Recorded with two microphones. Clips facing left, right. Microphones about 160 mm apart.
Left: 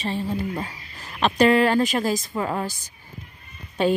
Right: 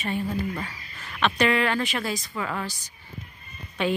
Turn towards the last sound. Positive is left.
turn(degrees=35)  # may be behind; listen again after turning